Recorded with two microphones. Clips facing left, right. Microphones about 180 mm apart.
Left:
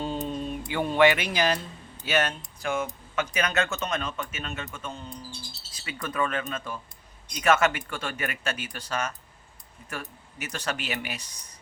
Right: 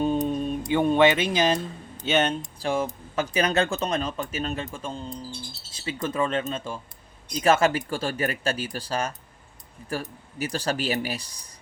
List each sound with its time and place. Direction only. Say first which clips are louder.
0.0 s mantra: right 6 dB; 15° right (ahead or behind)
0.7 s speech: right 2 dB; 20° right (ahead or behind)